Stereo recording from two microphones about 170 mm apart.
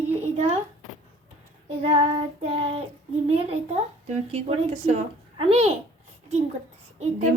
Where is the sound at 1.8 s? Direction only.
35° right (ahead or behind).